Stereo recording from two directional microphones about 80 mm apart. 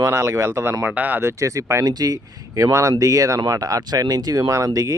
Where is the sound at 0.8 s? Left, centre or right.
Right.